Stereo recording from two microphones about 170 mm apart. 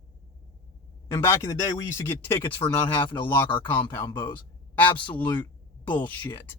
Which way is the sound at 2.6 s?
30° left (ahead or behind).